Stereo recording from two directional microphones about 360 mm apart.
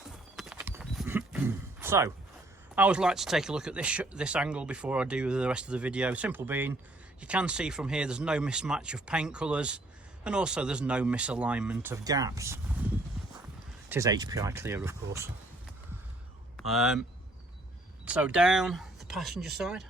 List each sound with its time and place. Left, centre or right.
0.3 s roaring cats: centre
2.7 s speech: centre
13.9 s speech: centre
16.6 s speech: centre
18.0 s speech: centre